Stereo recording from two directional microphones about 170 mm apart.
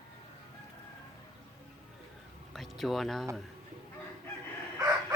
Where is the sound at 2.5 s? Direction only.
Centre (ahead or behind).